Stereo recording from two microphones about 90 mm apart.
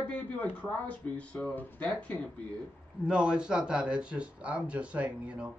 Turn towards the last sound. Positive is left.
turn(degrees=-10)  # may be behind; listen again after turning